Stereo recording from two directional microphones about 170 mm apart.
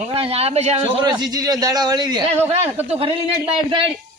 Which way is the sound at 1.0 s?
25° right (ahead or behind).